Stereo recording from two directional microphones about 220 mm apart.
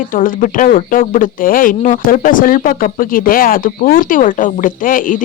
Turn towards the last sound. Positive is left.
turn(degrees=40)  # may be behind; listen again after turning